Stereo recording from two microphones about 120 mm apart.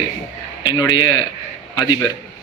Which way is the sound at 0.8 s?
35° left (ahead or behind).